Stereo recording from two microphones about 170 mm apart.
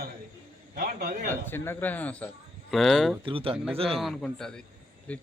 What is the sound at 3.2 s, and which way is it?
Speech, 30° right (ahead or behind).